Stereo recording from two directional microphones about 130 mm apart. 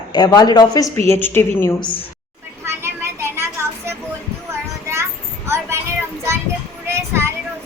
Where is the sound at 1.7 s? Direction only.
35° left (ahead or behind).